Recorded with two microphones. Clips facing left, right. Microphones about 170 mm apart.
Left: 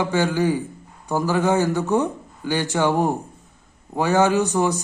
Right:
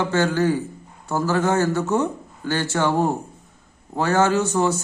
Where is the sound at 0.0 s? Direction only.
15° left (ahead or behind).